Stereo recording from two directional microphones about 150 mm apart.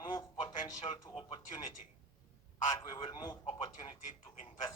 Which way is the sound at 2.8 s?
35° left (ahead or behind).